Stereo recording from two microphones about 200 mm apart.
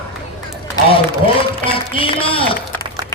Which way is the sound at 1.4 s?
25° left (ahead or behind).